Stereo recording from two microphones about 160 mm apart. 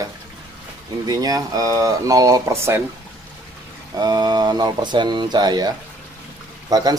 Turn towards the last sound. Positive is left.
turn(degrees=-25)  # may be behind; listen again after turning